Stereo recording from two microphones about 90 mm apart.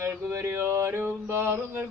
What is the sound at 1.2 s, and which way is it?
Mantra, 30° right (ahead or behind).